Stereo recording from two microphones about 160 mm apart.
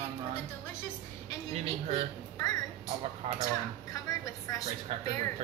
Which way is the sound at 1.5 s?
40° right (ahead or behind).